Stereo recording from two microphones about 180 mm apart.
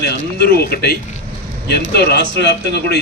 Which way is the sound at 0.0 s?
65° left (ahead or behind).